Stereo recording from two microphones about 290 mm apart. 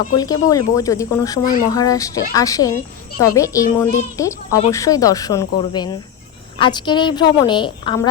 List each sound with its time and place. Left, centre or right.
0.2 s a woman's voice: centre